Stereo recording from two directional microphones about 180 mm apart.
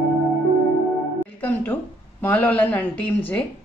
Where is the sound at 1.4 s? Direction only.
10° left (ahead or behind).